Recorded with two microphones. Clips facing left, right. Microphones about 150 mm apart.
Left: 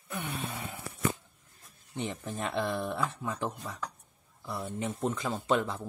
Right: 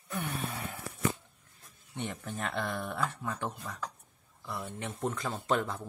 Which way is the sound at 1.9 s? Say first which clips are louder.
Left 2 dB; 30° left (ahead or behind).